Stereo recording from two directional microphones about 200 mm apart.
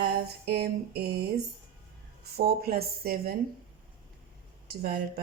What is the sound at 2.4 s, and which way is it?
Speech, 50° right (ahead or behind).